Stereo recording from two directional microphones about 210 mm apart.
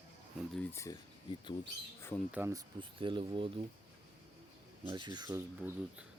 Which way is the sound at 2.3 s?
10° right (ahead or behind).